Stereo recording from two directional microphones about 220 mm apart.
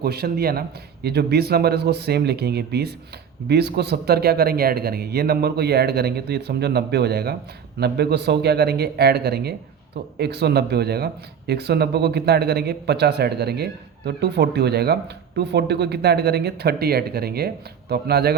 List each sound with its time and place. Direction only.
0.0 s speech: 45° right (ahead or behind)